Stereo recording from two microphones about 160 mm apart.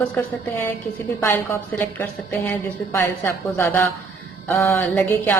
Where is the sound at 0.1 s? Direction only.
5° left (ahead or behind).